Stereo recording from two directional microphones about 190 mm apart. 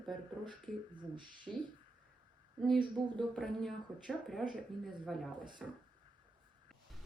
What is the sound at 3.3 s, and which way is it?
Speech, 5° left (ahead or behind).